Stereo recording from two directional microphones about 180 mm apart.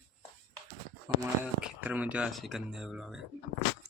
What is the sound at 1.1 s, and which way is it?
Speech, 20° right (ahead or behind).